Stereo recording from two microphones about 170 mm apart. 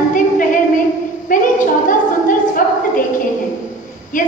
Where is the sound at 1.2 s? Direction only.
50° left (ahead or behind).